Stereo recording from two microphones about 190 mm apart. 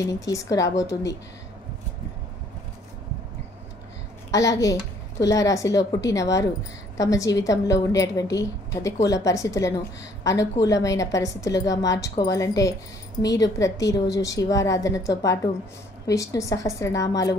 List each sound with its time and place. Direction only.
0.0 s a woman's voice: 15° left (ahead or behind)
4.3 s a woman's voice: 15° left (ahead or behind)